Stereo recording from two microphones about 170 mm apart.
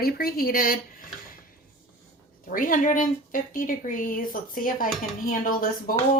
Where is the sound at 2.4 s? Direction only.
55° left (ahead or behind).